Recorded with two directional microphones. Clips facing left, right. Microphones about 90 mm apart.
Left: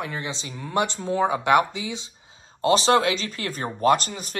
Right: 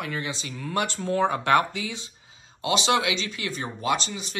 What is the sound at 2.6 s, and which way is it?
Speech, 40° left (ahead or behind).